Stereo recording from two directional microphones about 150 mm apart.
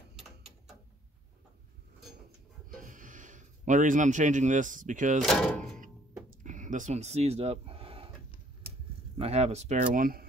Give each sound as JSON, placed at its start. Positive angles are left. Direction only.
{"t": 2.8, "sound": "a man's voice", "side_deg": -60}
{"t": 5.2, "sound": "speech", "side_deg": 0}
{"t": 6.4, "sound": "a sound", "side_deg": -55}
{"t": 9.1, "sound": "speech", "side_deg": -45}